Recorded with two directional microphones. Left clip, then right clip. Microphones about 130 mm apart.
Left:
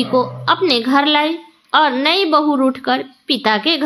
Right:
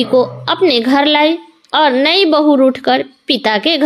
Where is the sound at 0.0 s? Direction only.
40° right (ahead or behind).